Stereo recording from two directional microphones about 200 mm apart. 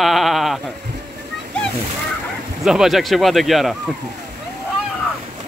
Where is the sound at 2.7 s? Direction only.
Centre (ahead or behind).